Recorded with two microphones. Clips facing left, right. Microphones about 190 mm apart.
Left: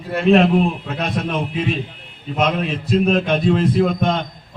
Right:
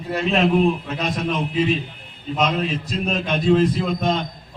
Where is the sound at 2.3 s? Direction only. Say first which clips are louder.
Left 2 dB; 55° left (ahead or behind).